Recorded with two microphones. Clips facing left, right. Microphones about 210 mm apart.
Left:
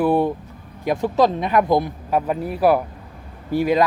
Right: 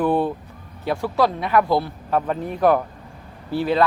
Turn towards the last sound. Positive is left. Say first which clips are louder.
# left 2 dB
turn(degrees=10)  # may be behind; listen again after turning